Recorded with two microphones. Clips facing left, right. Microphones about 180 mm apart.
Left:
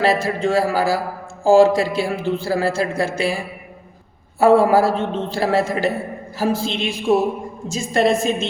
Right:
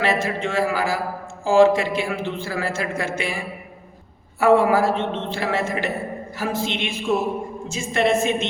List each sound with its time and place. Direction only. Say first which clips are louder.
0.0 s speech: left 4 dB; 35° left (ahead or behind)